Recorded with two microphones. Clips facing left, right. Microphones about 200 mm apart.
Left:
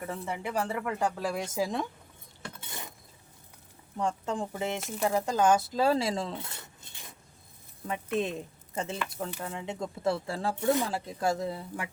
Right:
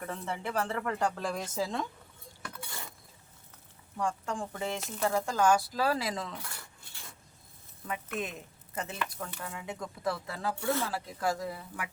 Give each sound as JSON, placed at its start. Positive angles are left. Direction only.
{"t": 0.0, "sound": "speech", "side_deg": 10}
{"t": 2.4, "sound": "cutlery", "side_deg": 25}
{"t": 3.9, "sound": "speech", "side_deg": 20}